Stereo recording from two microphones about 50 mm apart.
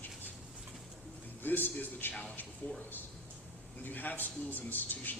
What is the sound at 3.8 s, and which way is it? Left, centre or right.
A man's voice, left.